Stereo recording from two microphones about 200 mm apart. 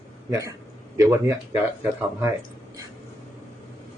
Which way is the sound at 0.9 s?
15° right (ahead or behind).